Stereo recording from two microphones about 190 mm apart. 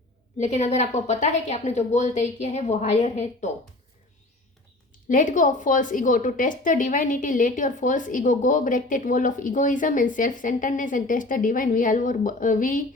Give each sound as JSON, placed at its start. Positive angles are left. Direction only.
{"t": 0.3, "sound": "a woman's voice", "side_deg": 35}
{"t": 5.0, "sound": "a woman's voice", "side_deg": 45}